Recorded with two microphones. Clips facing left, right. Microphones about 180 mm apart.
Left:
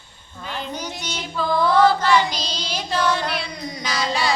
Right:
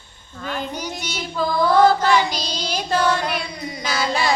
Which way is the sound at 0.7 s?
10° right (ahead or behind).